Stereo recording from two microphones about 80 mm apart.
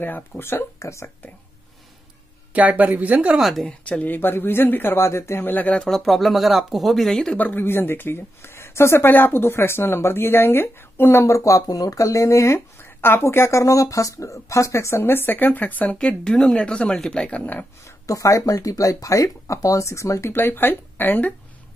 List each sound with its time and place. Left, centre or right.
0.0 s speech: left
2.5 s speech: centre
3.3 s speech: centre
3.6 s speech: centre
5.8 s speech: centre
7.3 s speech: left
17.8 s speech: left